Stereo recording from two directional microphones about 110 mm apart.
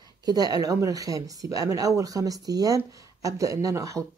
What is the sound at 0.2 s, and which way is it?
Speech, 35° right (ahead or behind).